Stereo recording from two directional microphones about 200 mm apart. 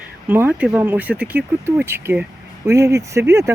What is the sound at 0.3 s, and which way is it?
Speech, 5° right (ahead or behind).